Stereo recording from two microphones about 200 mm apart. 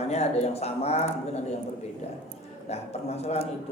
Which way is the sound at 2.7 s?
30° left (ahead or behind).